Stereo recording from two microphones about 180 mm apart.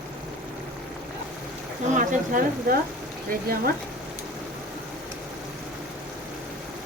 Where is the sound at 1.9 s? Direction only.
50° right (ahead or behind).